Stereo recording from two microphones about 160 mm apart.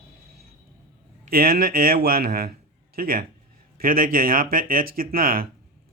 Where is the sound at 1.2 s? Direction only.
65° right (ahead or behind).